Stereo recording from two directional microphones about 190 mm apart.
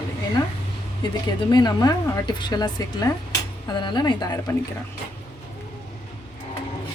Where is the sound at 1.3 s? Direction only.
20° left (ahead or behind).